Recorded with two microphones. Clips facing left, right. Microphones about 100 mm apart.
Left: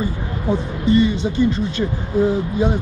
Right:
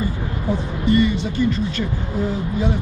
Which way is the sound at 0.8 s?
25° left (ahead or behind).